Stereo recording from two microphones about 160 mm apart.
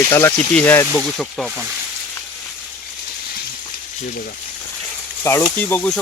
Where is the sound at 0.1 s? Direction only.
15° left (ahead or behind).